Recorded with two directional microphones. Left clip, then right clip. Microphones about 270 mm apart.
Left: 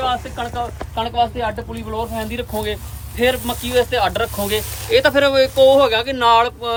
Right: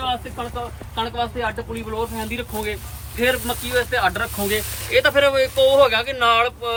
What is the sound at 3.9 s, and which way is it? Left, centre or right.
Speech, left.